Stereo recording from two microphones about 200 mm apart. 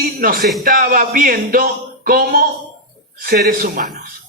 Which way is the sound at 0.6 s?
45° right (ahead or behind).